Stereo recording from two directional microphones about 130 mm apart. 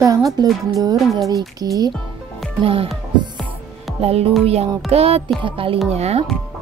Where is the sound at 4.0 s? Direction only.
50° right (ahead or behind).